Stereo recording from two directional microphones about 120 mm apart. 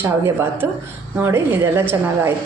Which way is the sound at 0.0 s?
20° right (ahead or behind).